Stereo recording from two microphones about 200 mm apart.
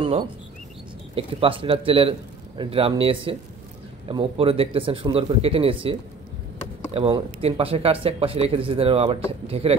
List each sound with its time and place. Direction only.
1.1 s speech: 25° right (ahead or behind)